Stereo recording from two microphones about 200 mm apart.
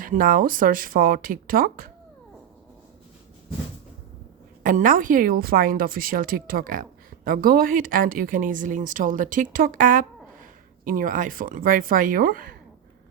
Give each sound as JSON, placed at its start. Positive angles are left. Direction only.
{"t": 0.0, "sound": "speech", "side_deg": -45}
{"t": 4.6, "sound": "speech", "side_deg": -40}